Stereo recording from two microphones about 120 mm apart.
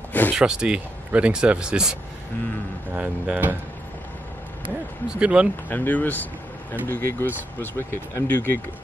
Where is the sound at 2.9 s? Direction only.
10° right (ahead or behind).